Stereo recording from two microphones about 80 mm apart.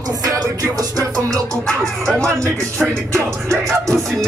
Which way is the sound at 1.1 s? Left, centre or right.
Centre.